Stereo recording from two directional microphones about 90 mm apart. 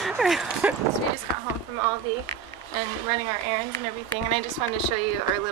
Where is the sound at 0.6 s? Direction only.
15° right (ahead or behind).